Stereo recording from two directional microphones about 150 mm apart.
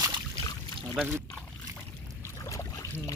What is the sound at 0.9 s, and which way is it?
Speech, 10° right (ahead or behind).